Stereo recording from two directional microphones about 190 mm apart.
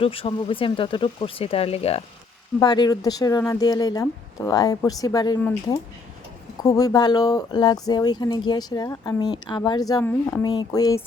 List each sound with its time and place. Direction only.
0.0 s speech: 30° left (ahead or behind)
5.4 s speech: 10° left (ahead or behind)
10.0 s speech: 10° left (ahead or behind)
10.4 s speech: 20° left (ahead or behind)